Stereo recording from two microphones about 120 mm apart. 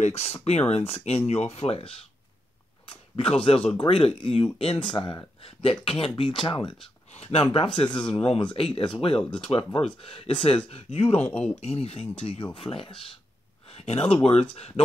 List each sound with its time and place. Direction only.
0.0 s speech: 65° left (ahead or behind); by 6.7 s 40° left (ahead or behind)
7.1 s speech: 55° left (ahead or behind)
7.5 s speech: 45° left (ahead or behind)
14.0 s speech: 50° left (ahead or behind)